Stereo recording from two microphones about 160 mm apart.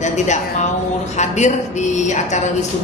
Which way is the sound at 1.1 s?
45° left (ahead or behind).